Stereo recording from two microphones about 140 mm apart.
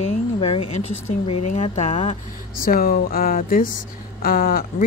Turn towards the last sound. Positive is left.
turn(degrees=90)